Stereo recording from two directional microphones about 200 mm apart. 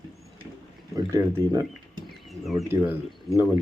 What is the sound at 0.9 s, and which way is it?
Speech, 15° right (ahead or behind).